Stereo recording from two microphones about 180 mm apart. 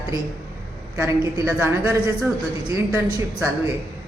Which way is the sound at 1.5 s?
10° right (ahead or behind).